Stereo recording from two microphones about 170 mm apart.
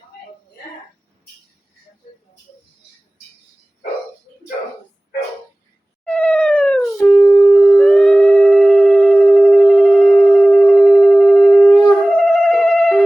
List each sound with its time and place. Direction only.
6.1 s cat: 5° left (ahead or behind)
6.9 s howl: 15° left (ahead or behind)
7.8 s a sound: 5° left (ahead or behind)